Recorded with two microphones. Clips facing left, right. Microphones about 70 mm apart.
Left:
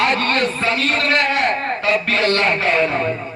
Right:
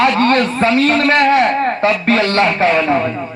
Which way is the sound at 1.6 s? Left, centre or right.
Right.